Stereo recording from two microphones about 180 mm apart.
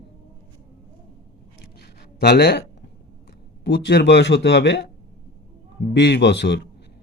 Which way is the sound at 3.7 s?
70° left (ahead or behind).